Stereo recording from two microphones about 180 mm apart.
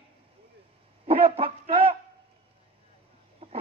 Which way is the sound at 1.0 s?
30° right (ahead or behind).